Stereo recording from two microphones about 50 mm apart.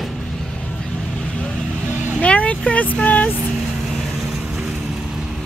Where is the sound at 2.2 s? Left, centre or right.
Left.